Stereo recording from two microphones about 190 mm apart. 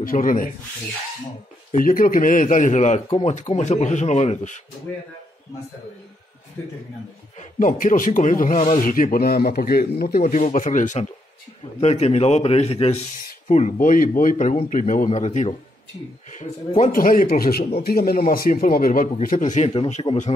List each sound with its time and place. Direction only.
0.0 s speech: 45° left (ahead or behind)
1.7 s speech: 45° left (ahead or behind)
7.3 s speech: 45° left (ahead or behind)
19.7 s speech: 30° left (ahead or behind)